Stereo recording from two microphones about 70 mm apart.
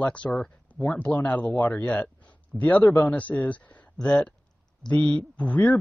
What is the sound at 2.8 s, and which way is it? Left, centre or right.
Speech, left.